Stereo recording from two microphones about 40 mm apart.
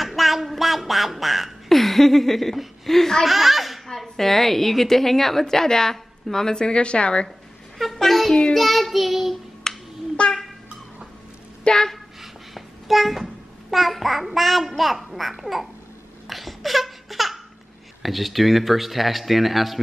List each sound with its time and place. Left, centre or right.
0.0 s quack: centre
3.3 s speech: centre; by 7.2 s left
7.8 s a sound: centre
8.5 s a child's voice: centre
9.6 s a sound: centre
11.6 s speech: centre
12.2 s a sound: centre
13.7 s a child's voice: centre
16.3 s laughter: centre
18.0 s a child's voice: centre